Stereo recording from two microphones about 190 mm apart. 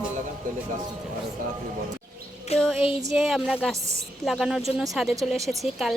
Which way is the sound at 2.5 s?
30° left (ahead or behind).